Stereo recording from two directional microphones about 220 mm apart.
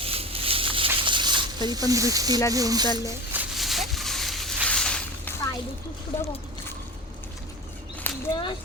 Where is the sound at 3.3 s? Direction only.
5° right (ahead or behind).